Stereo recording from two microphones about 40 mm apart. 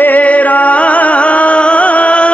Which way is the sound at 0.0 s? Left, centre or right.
Left.